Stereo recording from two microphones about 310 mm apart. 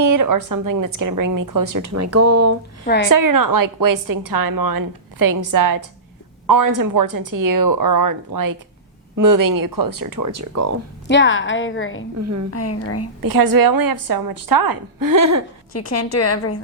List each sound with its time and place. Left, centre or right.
0.0 s a woman's voice: right
2.8 s a woman's voice: left
3.1 s a woman's voice: right
11.1 s a woman's voice: left
12.2 s a woman's voice: right
12.5 s a woman's voice: left
13.2 s a woman's voice: right
15.7 s a woman's voice: left